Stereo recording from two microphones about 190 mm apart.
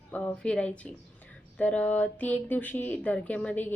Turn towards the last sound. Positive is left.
turn(degrees=10)  # may be behind; listen again after turning